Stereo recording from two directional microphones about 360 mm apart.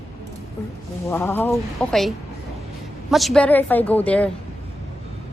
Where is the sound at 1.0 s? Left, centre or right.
Centre.